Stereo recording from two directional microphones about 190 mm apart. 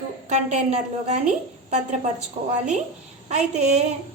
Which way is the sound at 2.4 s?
35° right (ahead or behind).